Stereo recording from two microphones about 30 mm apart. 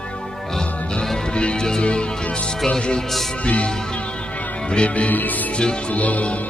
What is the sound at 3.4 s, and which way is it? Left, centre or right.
Music, left.